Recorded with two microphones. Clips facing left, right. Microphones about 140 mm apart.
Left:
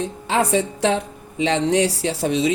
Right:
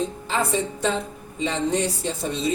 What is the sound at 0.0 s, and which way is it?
Speech, 80° left.